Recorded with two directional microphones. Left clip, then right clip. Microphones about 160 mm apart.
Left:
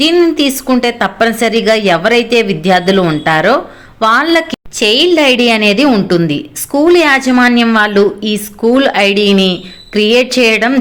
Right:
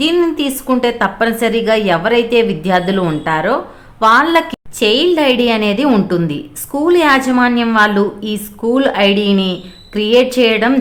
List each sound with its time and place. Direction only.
0.0 s a woman's voice: 15° left (ahead or behind)